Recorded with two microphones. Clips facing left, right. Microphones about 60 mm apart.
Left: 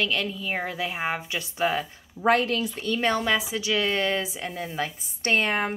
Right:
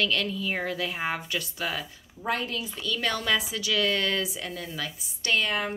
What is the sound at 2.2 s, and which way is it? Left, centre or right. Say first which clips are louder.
Speech: left 8 dB; left.